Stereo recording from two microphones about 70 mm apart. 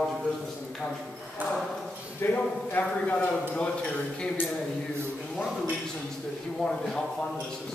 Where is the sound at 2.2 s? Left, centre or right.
Left.